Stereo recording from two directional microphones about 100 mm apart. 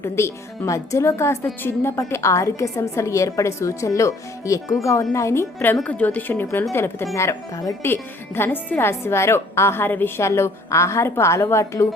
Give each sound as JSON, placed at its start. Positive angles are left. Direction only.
{"t": 0.0, "sound": "a woman's voice", "side_deg": 30}
{"t": 5.8, "sound": "a woman's voice", "side_deg": 15}
{"t": 8.4, "sound": "a woman's voice", "side_deg": 20}